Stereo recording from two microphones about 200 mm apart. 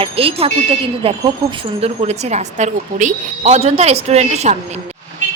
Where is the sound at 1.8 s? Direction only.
30° right (ahead or behind).